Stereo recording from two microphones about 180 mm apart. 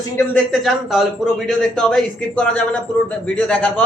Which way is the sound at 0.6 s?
Centre (ahead or behind).